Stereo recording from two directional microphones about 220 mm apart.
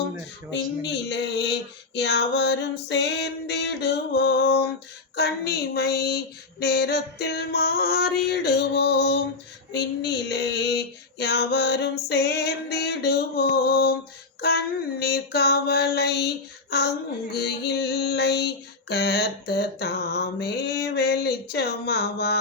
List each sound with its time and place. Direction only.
0.9 s female singing: 50° left (ahead or behind)